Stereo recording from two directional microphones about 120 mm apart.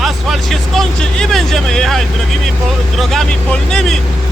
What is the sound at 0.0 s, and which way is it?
Vehicle, centre (ahead or behind).